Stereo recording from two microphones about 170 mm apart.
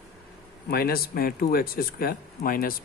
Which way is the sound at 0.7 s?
65° left (ahead or behind).